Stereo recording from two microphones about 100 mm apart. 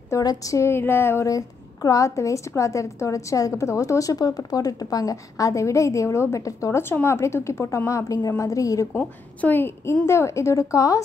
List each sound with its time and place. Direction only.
0.1 s a woman's voice: 35° left (ahead or behind)
8.9 s a woman's voice: 20° left (ahead or behind)